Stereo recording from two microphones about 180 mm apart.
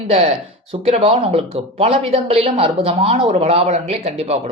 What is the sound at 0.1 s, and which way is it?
Speech, 35° right (ahead or behind).